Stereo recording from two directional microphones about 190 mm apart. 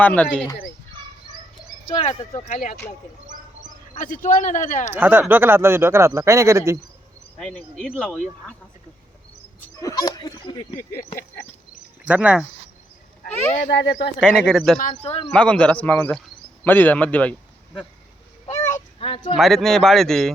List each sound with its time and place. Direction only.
0.0 s speech: 10° left (ahead or behind)
1.9 s a man's voice: 35° left (ahead or behind)
4.0 s a man's voice: 45° left (ahead or behind)
4.9 s speech: 10° right (ahead or behind)
7.3 s speech: 5° left (ahead or behind)
9.6 s speech: 15° left (ahead or behind)
12.0 s speech: 5° right (ahead or behind)
14.2 s speech: 5° left (ahead or behind)
14.8 s a man's voice: 40° left (ahead or behind)
15.3 s speech: 5° left (ahead or behind)
18.7 s a sound: 30° left (ahead or behind)
19.4 s speech: centre (ahead or behind)